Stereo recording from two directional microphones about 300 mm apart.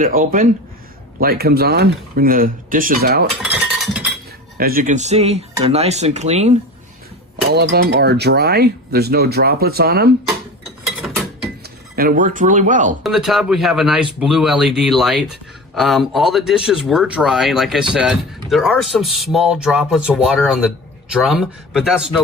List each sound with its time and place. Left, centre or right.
0.0 s speech: right
3.4 s a sound: centre
4.5 s speech: right
7.5 s speech: right
10.8 s mechanisms: centre
11.9 s speech: right
13.0 s speech: centre